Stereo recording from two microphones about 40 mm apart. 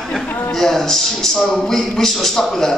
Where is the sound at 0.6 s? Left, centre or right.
Centre.